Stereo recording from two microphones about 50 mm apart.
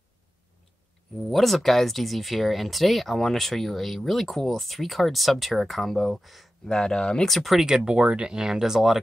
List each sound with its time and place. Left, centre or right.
1.3 s speech: centre
6.7 s speech: centre
7.2 s speech: centre
7.6 s speech: centre